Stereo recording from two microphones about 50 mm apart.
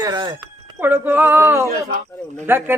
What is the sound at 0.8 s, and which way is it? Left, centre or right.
Speech, right.